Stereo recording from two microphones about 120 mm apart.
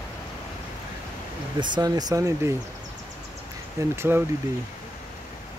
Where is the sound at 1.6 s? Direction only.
35° right (ahead or behind).